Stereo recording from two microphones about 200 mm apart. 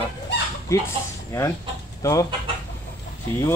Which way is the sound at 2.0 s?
15° left (ahead or behind).